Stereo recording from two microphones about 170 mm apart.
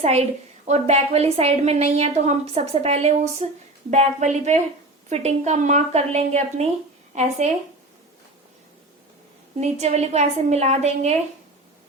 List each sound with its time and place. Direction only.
0.0 s a woman's voice: 40° right (ahead or behind)
9.6 s a woman's voice: 40° right (ahead or behind)